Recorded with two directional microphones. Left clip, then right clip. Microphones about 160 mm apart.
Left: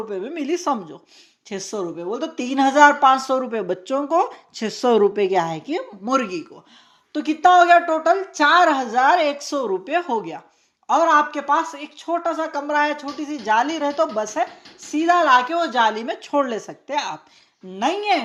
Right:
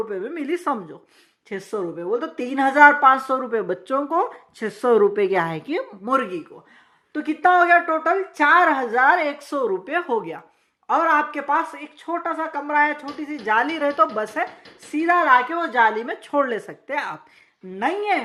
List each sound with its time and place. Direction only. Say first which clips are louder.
0.1 s speech: left 1 dB; 20° left (ahead or behind)
4.2 s speech: left 2 dB; 30° left (ahead or behind)
5.1 s a woman's voice: left 1 dB; 5° left (ahead or behind)
6.1 s a woman's voice: left 1 dB; 30° left (ahead or behind); by 14.4 s 10° left (ahead or behind)
14.9 s speech: left 1 dB; 30° left (ahead or behind)
17.7 s a woman's voice: left 2 dB; 35° left (ahead or behind)